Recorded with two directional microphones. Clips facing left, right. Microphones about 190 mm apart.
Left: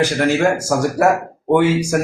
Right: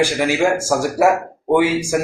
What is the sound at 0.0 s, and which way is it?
Speech, 10° right (ahead or behind).